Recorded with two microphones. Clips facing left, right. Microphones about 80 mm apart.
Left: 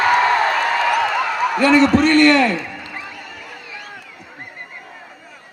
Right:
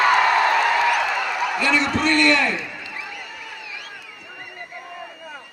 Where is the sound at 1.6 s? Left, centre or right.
Left.